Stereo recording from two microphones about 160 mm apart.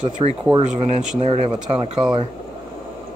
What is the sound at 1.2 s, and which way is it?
Speech, 35° right (ahead or behind).